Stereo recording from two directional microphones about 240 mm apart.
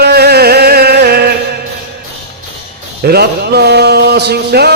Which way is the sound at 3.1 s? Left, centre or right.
Right.